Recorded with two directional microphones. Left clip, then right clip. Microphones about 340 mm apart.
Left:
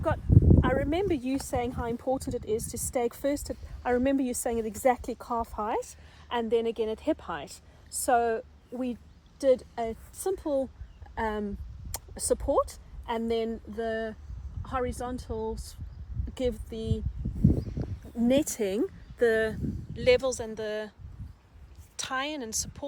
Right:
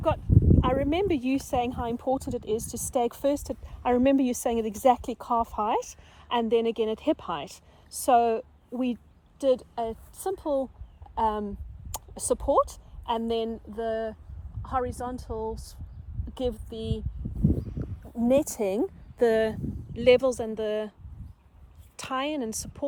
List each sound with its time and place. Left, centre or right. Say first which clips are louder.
0.3 s a sound: left 1 dB; centre
0.6 s speech: right 2 dB; right
2.3 s speech: right 1 dB; centre
3.3 s speech: right 2 dB; right
5.1 s a woman's voice: right 5 dB; centre
12.5 s speech: right 7 dB; centre
17.6 s a sound: left 1 dB; centre
18.2 s speech: right 2 dB; centre
21.9 s speech: right 2 dB; right